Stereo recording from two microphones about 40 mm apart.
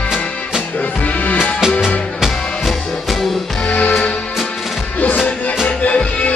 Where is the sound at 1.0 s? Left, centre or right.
Left.